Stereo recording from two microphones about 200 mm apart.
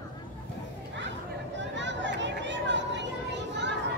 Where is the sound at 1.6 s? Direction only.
65° right (ahead or behind).